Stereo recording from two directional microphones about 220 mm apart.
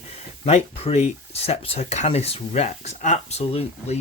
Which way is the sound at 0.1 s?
30° left (ahead or behind).